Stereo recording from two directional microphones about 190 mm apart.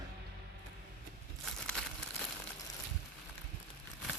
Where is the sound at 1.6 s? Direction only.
5° left (ahead or behind).